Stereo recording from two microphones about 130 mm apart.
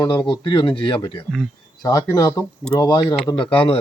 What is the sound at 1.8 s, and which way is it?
Speech, 30° left (ahead or behind).